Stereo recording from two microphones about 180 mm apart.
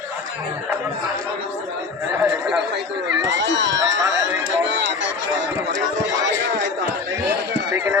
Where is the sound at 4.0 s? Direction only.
20° right (ahead or behind).